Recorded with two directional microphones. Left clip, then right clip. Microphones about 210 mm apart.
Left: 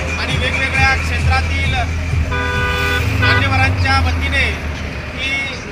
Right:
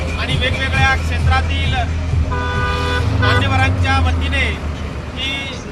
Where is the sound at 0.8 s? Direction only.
Centre (ahead or behind).